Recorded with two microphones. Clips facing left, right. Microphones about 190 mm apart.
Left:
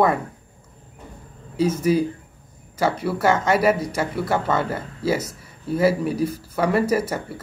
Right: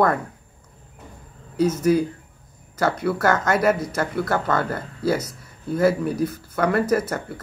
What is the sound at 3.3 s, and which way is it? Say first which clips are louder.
Speech: left 1 dB; 30° left (ahead or behind).